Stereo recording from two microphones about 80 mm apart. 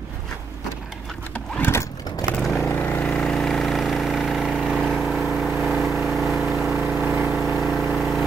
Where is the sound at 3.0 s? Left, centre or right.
Centre.